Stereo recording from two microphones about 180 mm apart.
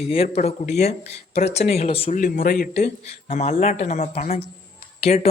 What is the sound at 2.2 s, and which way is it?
Speech, 50° left (ahead or behind).